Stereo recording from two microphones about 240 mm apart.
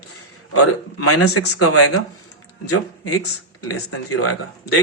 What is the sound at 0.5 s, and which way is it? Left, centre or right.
Speech, left.